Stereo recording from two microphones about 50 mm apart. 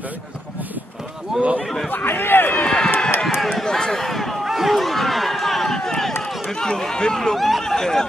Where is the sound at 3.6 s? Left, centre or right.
Centre.